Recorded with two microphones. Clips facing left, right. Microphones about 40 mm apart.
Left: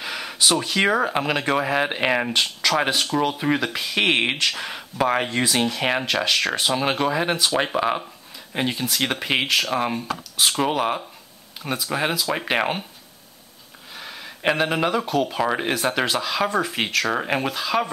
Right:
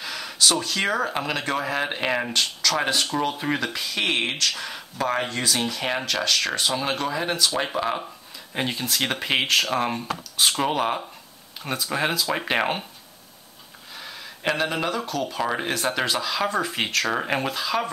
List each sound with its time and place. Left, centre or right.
0.0 s speech: centre
3.9 s speech: left
8.5 s speech: centre
13.9 s a sound: centre
14.5 s speech: centre